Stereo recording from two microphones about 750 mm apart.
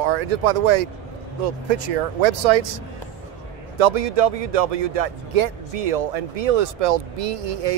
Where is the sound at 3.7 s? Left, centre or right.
Right.